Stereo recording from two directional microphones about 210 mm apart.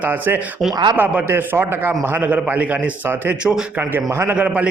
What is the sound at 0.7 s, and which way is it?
Speech, 20° right (ahead or behind).